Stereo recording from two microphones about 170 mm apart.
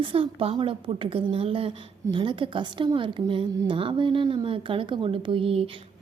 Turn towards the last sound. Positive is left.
turn(degrees=-35)  # may be behind; listen again after turning